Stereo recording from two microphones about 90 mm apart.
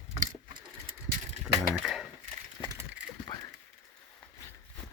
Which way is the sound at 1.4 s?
5° right (ahead or behind).